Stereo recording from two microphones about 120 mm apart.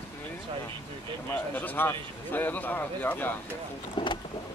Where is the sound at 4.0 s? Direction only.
40° left (ahead or behind).